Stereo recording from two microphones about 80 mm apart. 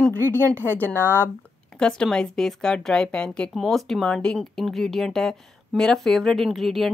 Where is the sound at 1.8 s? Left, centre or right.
Centre.